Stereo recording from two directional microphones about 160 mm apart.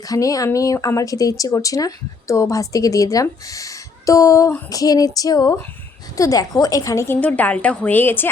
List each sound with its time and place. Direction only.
0.1 s a woman's voice: 20° left (ahead or behind)